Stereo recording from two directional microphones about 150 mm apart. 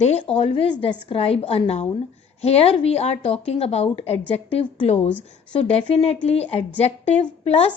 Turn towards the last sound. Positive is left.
turn(degrees=40)  # may be behind; listen again after turning